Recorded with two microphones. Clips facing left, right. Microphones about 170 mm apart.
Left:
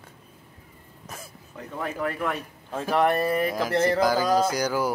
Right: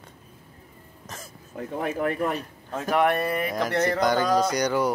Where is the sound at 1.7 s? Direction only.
35° right (ahead or behind).